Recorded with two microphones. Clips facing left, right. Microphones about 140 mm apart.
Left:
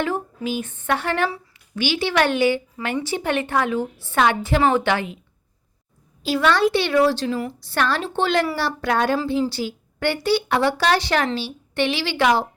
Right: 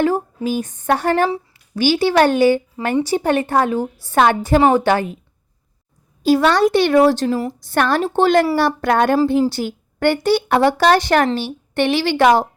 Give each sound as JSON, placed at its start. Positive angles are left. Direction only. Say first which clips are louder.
{"t": 0.4, "sound": "a woman's voice", "louder": "right 5 dB", "side_deg": -40}
{"t": 6.2, "sound": "a woman's voice", "louder": "right 5 dB", "side_deg": -40}